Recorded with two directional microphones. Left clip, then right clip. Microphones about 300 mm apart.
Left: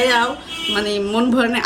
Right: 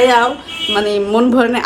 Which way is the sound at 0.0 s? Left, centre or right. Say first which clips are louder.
Right 5 dB; centre.